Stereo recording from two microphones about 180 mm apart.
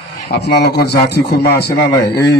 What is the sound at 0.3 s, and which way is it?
Speech, 65° left (ahead or behind).